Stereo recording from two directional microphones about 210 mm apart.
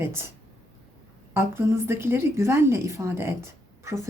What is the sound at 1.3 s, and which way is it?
A woman's voice, 10° right (ahead or behind).